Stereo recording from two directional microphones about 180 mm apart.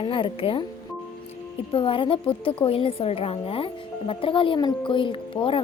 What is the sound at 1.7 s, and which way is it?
A woman's voice, 30° left (ahead or behind).